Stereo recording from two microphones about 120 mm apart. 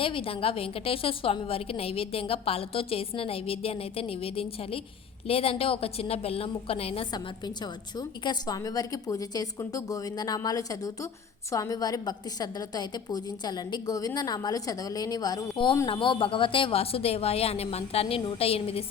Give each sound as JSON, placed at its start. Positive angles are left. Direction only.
{"t": 0.0, "sound": "a woman's voice", "side_deg": 50}
{"t": 7.1, "sound": "a woman's voice", "side_deg": 35}
{"t": 15.9, "sound": "a woman's voice", "side_deg": 45}